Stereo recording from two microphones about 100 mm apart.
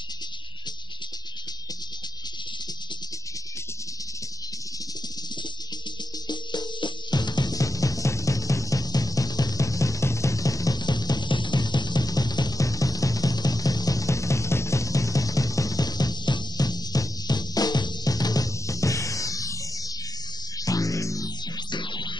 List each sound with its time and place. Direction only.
6.2 s music: 45° left (ahead or behind)
20.6 s music: 35° left (ahead or behind)
21.6 s music: 50° left (ahead or behind)